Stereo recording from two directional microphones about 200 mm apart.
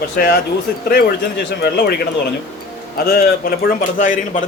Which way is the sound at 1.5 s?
55° left (ahead or behind).